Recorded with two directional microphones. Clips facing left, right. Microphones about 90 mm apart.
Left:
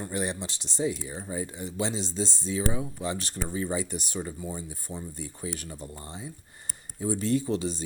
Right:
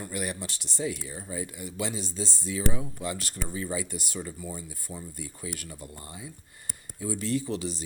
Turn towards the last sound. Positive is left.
turn(degrees=25)  # may be behind; listen again after turning